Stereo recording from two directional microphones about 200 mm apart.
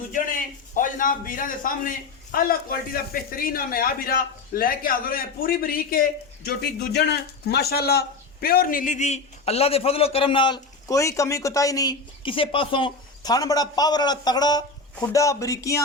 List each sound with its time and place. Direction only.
0.1 s a man's voice: 40° left (ahead or behind); by 15.8 s 15° left (ahead or behind)